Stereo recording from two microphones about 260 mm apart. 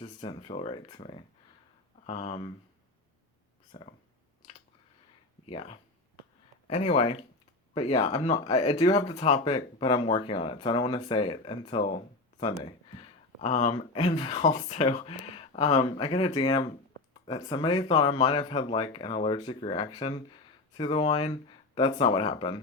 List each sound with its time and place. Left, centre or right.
0.0 s speech: centre
3.7 s speech: centre
5.5 s speech: left